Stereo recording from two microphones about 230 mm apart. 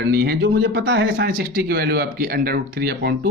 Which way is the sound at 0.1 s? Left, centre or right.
Right.